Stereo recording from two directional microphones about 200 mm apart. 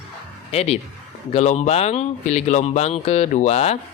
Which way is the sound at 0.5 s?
30° left (ahead or behind).